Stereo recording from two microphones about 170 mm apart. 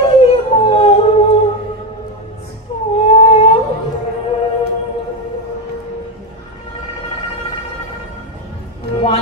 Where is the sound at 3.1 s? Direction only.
40° left (ahead or behind).